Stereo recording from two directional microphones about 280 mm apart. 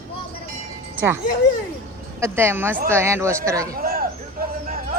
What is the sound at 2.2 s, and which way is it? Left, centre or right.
Speech, centre.